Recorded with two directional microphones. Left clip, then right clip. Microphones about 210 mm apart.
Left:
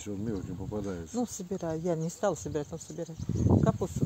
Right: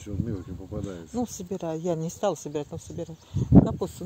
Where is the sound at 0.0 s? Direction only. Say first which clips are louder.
Right 1 dB; 40° left (ahead or behind).